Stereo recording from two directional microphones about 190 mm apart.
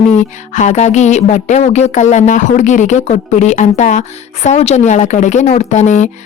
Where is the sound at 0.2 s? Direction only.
40° left (ahead or behind).